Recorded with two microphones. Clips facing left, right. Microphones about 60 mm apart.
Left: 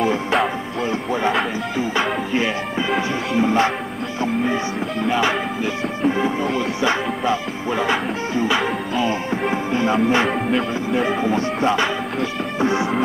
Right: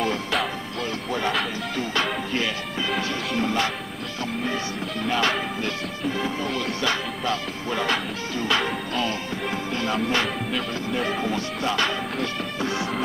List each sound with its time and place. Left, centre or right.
0.0 s music: centre
1.1 s speech: centre
3.0 s music: centre
5.0 s music: centre
6.0 s music: left
9.3 s music: left